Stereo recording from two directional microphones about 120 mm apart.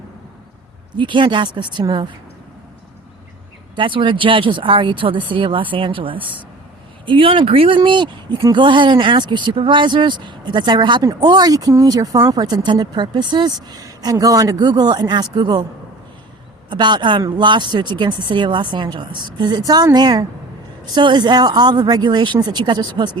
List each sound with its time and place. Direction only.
0.9 s speech: 40° right (ahead or behind)
3.8 s speech: 45° right (ahead or behind)
16.6 s speech: 40° right (ahead or behind)